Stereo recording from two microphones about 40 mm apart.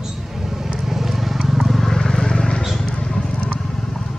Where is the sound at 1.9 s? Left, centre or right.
Centre.